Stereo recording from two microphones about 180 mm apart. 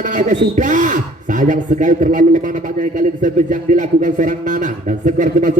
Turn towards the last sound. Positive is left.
turn(degrees=-45)  # may be behind; listen again after turning